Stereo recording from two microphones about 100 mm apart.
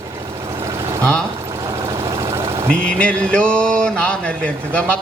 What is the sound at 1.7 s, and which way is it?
Vehicle, 35° right (ahead or behind).